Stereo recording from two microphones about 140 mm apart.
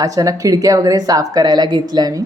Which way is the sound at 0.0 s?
25° right (ahead or behind).